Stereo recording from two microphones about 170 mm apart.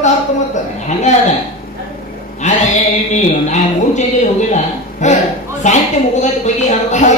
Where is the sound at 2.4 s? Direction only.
45° left (ahead or behind).